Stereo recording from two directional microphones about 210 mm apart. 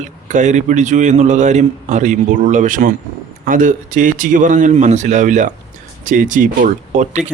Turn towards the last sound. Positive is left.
turn(degrees=-35)  # may be behind; listen again after turning